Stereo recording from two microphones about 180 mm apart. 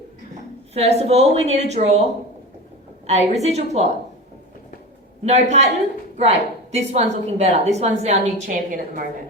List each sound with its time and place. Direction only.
0.7 s a woman's voice: 35° right (ahead or behind)
3.1 s a woman's voice: 40° right (ahead or behind)
5.2 s a woman's voice: 40° right (ahead or behind)